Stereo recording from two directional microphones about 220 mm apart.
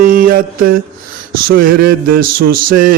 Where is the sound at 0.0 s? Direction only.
40° right (ahead or behind).